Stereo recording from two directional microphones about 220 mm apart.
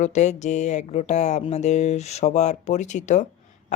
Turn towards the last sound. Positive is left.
turn(degrees=35)  # may be behind; listen again after turning